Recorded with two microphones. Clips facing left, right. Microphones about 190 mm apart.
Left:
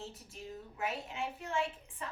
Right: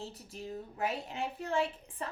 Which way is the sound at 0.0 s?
35° right (ahead or behind).